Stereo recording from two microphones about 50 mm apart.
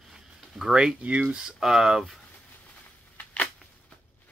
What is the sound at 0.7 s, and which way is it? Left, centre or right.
Speech, centre.